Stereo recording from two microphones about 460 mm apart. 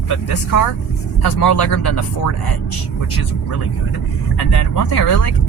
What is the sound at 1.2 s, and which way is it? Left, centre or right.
Speech, left.